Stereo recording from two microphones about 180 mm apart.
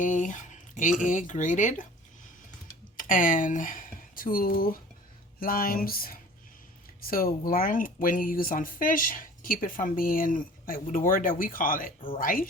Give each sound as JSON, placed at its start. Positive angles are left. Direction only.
{"t": 0.0, "sound": "speech", "side_deg": 45}
{"t": 3.0, "sound": "speech", "side_deg": 50}